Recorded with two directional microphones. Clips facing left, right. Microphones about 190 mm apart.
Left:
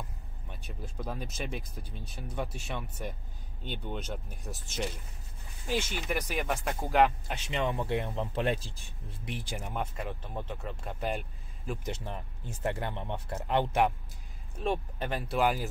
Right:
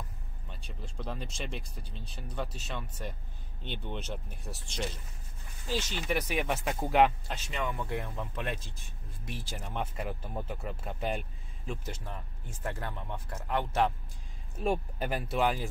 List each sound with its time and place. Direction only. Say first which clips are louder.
0.5 s speech: left 2 dB; 10° left (ahead or behind)
5.7 s speech: left 1 dB; 15° left (ahead or behind)
6.1 s speech: right 1 dB; centre (ahead or behind)
7.5 s speech: left 4 dB; 25° left (ahead or behind)
9.3 s speech: left 3 dB; 15° left (ahead or behind)
9.8 s speech: right 2 dB; 5° right (ahead or behind)
11.8 s speech: left 4 dB; 20° left (ahead or behind)
13.7 s speech: right 1 dB; 15° left (ahead or behind)
14.6 s speech: right 1 dB; 5° right (ahead or behind)